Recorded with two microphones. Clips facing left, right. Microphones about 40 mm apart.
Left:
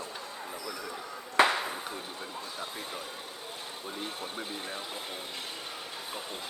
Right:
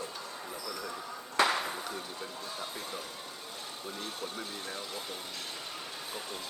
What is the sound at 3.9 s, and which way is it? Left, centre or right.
Speech, left.